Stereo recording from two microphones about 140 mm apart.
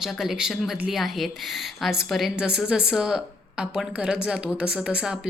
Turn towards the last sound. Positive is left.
turn(degrees=-5)  # may be behind; listen again after turning